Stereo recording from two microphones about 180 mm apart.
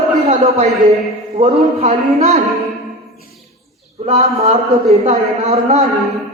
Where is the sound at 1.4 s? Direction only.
35° right (ahead or behind).